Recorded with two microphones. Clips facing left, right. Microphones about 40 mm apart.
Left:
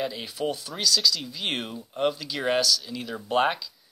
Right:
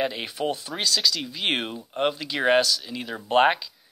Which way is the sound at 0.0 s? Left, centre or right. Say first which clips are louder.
Right 3 dB; right.